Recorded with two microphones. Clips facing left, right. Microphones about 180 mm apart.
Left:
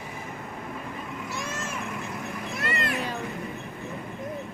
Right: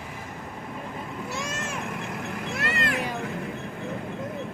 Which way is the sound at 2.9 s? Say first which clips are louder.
Right 1 dB; 15° right (ahead or behind).